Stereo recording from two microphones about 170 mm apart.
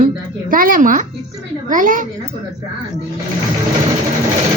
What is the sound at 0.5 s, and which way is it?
A woman's voice, 55° right (ahead or behind).